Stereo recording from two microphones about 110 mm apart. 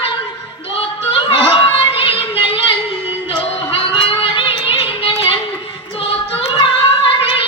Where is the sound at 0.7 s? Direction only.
60° left (ahead or behind).